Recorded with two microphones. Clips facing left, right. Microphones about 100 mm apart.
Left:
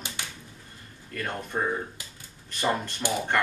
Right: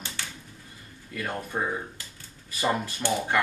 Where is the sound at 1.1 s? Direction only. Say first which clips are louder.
Even; 5° right (ahead or behind).